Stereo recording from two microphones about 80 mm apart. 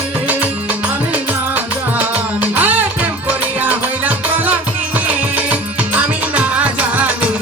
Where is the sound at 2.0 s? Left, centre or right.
Centre.